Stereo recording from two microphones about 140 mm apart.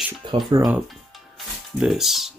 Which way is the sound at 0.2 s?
35° right (ahead or behind).